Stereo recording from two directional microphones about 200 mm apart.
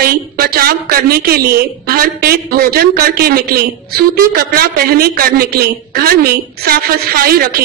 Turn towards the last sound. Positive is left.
turn(degrees=-50)  # may be behind; listen again after turning